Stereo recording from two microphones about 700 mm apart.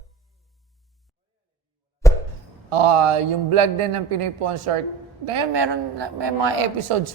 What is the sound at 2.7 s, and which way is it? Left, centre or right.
A man's voice, right.